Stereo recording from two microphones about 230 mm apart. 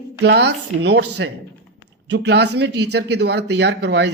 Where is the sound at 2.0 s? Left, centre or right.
Right.